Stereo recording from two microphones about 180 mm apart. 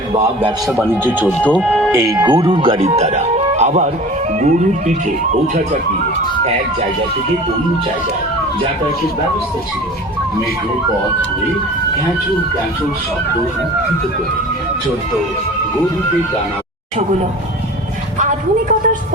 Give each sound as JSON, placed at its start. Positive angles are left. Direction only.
{"t": 0.9, "sound": "speech", "side_deg": -10}
{"t": 1.3, "sound": "speech", "side_deg": 5}
{"t": 1.9, "sound": "speech", "side_deg": -15}
{"t": 2.5, "sound": "speech", "side_deg": -25}
{"t": 18.2, "sound": "speech", "side_deg": -45}